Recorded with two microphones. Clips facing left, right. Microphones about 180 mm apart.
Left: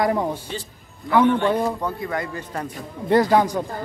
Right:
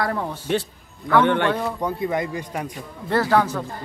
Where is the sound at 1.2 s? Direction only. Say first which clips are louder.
Left 5 dB; 70° right (ahead or behind).